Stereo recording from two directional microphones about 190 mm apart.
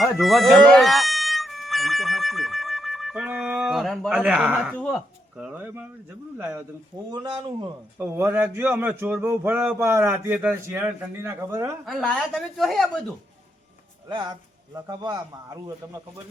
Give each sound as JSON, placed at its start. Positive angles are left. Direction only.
{"t": 0.0, "sound": "a man's voice", "side_deg": 0}
{"t": 6.9, "sound": "a man's voice", "side_deg": -20}
{"t": 7.9, "sound": "a man's voice", "side_deg": -15}
{"t": 11.9, "sound": "speech", "side_deg": 0}
{"t": 14.1, "sound": "a man's voice", "side_deg": -25}